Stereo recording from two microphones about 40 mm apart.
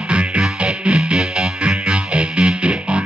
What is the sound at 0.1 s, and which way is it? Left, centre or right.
Music, right.